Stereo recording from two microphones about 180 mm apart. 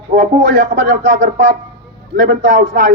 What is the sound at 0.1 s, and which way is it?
A man's voice, 55° right (ahead or behind).